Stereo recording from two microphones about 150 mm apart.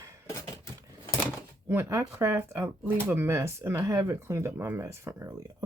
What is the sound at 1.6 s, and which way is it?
Speech, 15° right (ahead or behind).